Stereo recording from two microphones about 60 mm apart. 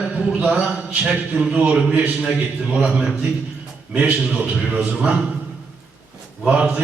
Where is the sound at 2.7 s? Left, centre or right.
Centre.